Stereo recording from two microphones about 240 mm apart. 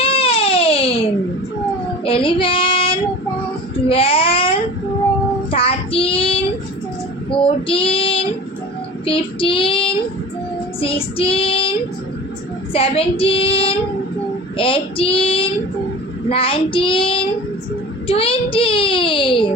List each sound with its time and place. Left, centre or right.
0.0 s baby cry: left
2.0 s child singing: left
3.8 s a sound: left
5.5 s child singing: left
10.8 s a child's voice: left